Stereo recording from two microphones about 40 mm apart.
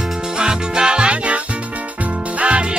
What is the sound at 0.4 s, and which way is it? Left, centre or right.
Music, centre.